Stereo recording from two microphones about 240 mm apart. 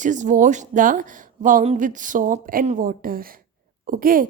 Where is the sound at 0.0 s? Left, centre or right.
Right.